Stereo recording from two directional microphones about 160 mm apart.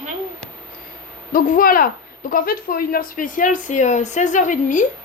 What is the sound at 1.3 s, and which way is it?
Speech, 60° left (ahead or behind).